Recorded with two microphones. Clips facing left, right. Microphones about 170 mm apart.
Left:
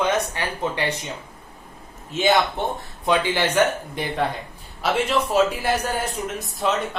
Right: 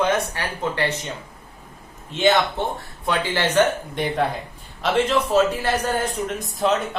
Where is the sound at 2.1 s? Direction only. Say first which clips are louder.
Right 1 dB; 10° left (ahead or behind).